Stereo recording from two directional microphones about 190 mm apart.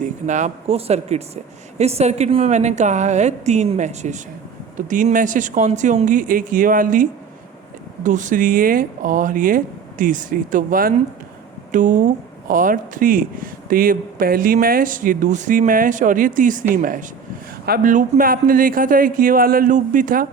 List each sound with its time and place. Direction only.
0.0 s a woman's voice: 40° right (ahead or behind)